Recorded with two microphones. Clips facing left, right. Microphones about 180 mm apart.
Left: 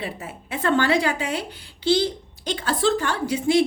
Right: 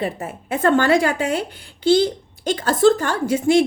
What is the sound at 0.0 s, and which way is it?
A woman's voice, 50° right (ahead or behind).